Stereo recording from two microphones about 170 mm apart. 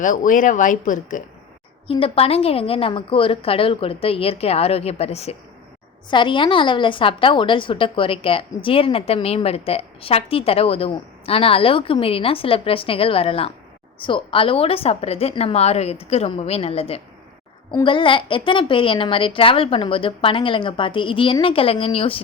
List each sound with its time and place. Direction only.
0.0 s speech: 50° left (ahead or behind)
1.9 s a woman's voice: 35° left (ahead or behind)